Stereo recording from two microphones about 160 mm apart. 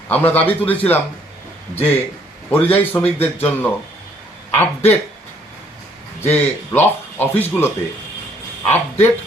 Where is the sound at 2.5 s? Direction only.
10° left (ahead or behind).